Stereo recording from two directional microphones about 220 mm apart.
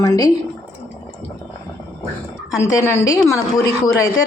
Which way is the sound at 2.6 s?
15° left (ahead or behind).